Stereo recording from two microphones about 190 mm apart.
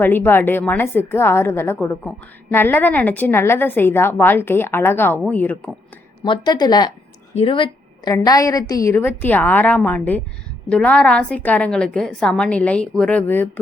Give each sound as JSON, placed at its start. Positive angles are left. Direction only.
{"t": 0.0, "sound": "a woman's voice", "side_deg": 10}
{"t": 6.2, "sound": "a woman's voice", "side_deg": 25}